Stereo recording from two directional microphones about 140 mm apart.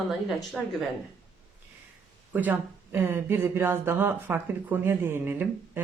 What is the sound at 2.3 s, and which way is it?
Speech, 15° right (ahead or behind).